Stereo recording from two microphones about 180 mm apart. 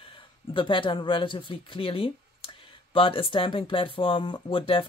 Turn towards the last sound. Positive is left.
turn(degrees=30)  # may be behind; listen again after turning